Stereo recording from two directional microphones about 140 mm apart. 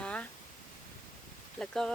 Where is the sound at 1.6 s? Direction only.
5° left (ahead or behind).